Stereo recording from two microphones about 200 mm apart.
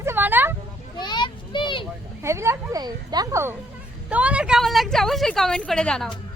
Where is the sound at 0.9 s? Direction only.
20° left (ahead or behind).